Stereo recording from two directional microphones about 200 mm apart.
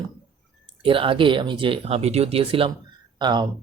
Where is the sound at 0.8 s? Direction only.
25° right (ahead or behind).